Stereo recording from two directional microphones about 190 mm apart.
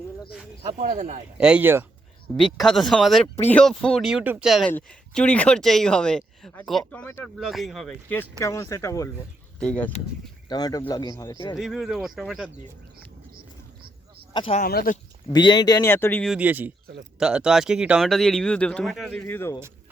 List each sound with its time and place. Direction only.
0.8 s speech: 40° right (ahead or behind)
1.4 s speech: 5° right (ahead or behind); by 9.1 s 15° left (ahead or behind)
9.6 s speech: 5° left (ahead or behind)
10.5 s speech: 20° left (ahead or behind)
11.5 s speech: centre (ahead or behind)
14.3 s speech: 30° left (ahead or behind)
14.6 s speech: 50° left (ahead or behind)
15.3 s speech: 20° left (ahead or behind)
16.2 s speech: 5° right (ahead or behind); by 19.5 s 10° left (ahead or behind)